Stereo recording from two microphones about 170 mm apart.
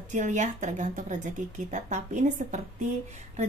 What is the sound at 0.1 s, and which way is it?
A woman's voice, 45° right (ahead or behind).